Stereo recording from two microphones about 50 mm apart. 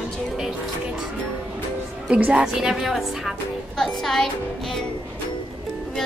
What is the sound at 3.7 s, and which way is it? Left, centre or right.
Music, centre.